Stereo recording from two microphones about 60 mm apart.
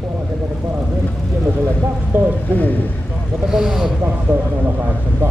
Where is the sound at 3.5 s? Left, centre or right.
Centre.